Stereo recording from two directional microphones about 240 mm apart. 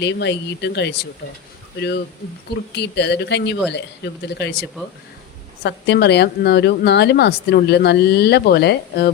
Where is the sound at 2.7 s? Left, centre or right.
Left.